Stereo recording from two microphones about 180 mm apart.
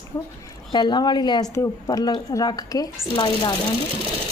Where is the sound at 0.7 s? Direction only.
25° left (ahead or behind).